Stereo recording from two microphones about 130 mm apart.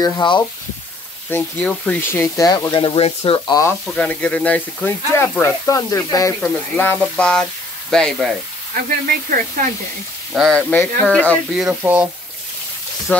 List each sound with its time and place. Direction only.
0.0 s speech: 35° left (ahead or behind)
1.3 s speech: 10° left (ahead or behind)
2.4 s speech: 30° left (ahead or behind); by 3.3 s 50° left (ahead or behind)
3.3 s speech: 25° left (ahead or behind)
3.8 s speech: 5° left (ahead or behind); by 6.3 s 25° left (ahead or behind)
6.4 s speech: 15° left (ahead or behind)
9.0 s speech: 90° right
10.3 s speech: centre (ahead or behind)
10.7 s speech: 15° left (ahead or behind)
11.8 s speech: 10° right (ahead or behind)